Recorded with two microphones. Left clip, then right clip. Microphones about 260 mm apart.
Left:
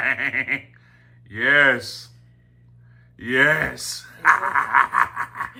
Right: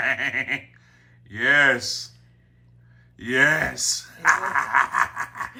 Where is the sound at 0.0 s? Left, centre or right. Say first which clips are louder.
Left 1 dB; centre.